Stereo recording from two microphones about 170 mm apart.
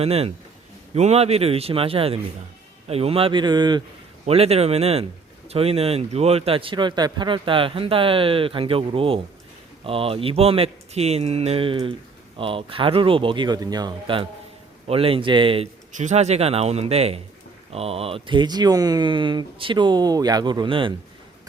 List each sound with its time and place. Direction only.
0.0 s speech: 35° right (ahead or behind)
4.3 s speech: 35° right (ahead or behind)